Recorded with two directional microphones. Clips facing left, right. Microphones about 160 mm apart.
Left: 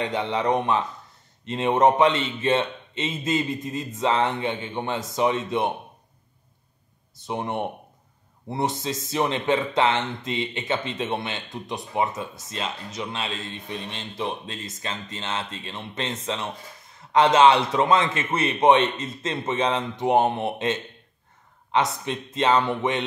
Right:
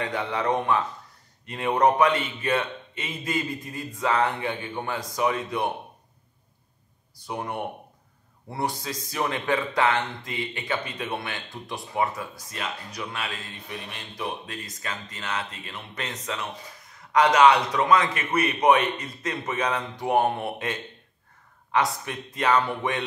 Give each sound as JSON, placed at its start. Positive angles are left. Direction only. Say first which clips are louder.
{"t": 0.0, "sound": "speech", "louder": "left 2 dB", "side_deg": 20}
{"t": 7.2, "sound": "speech", "louder": "left 3 dB", "side_deg": 25}